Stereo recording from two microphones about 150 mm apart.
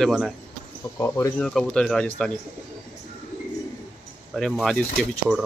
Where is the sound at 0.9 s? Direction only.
15° left (ahead or behind).